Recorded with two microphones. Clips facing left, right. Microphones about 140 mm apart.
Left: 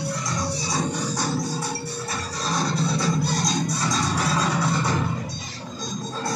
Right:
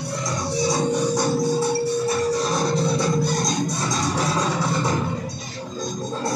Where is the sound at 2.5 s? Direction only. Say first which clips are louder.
Right 4 dB; 25° right (ahead or behind).